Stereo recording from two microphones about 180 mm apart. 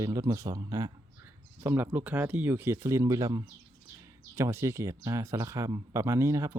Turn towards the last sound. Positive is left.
turn(degrees=-15)  # may be behind; listen again after turning